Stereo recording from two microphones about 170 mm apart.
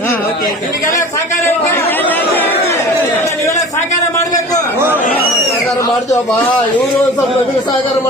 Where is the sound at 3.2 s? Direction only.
20° left (ahead or behind).